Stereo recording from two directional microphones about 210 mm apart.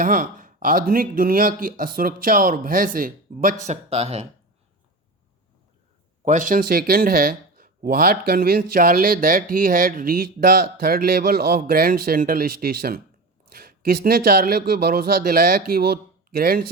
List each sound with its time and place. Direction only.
0.0 s speech: 40° right (ahead or behind)
3.7 s speech: 30° right (ahead or behind)
6.2 s speech: 35° right (ahead or behind)